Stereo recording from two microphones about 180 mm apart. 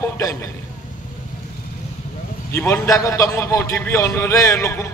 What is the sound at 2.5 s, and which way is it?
A man's voice, 15° left (ahead or behind).